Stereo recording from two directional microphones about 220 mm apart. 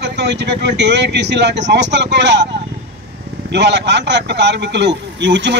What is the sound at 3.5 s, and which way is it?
A man's voice, 50° right (ahead or behind).